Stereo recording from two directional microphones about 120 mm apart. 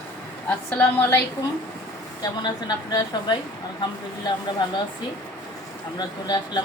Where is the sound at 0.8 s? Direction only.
25° left (ahead or behind).